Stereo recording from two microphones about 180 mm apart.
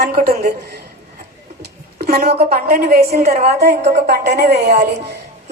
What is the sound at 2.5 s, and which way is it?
A woman's voice, 55° right (ahead or behind).